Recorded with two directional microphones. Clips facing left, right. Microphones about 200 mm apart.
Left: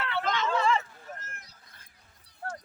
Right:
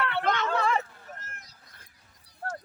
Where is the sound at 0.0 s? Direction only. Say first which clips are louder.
Right 2 dB; 60° right (ahead or behind).